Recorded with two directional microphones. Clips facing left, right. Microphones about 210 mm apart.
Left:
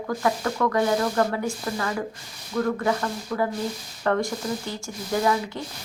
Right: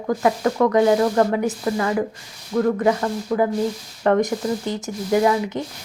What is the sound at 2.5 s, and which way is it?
Sizzle, 30° right (ahead or behind).